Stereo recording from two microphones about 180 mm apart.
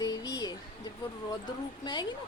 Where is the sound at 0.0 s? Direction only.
20° left (ahead or behind).